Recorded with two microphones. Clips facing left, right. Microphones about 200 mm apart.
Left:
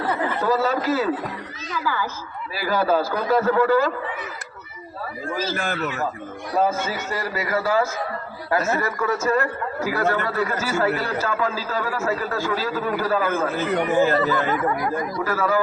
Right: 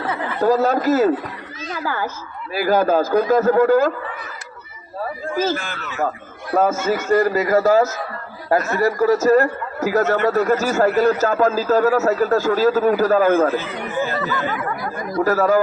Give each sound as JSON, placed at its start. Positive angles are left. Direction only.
{"t": 0.4, "sound": "a man's voice", "side_deg": -45}
{"t": 5.3, "sound": "a man's voice", "side_deg": -50}
{"t": 5.5, "sound": "speech", "side_deg": 55}
{"t": 6.5, "sound": "a man's voice", "side_deg": -50}
{"t": 13.6, "sound": "speech", "side_deg": 50}
{"t": 15.1, "sound": "speech", "side_deg": -40}